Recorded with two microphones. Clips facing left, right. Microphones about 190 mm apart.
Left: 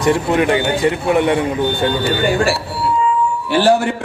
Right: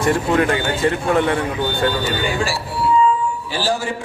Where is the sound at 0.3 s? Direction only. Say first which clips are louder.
Left 3 dB; 20° left (ahead or behind).